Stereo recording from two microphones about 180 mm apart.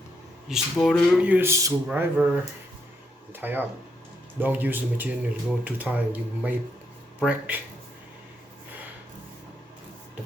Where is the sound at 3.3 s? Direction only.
10° right (ahead or behind).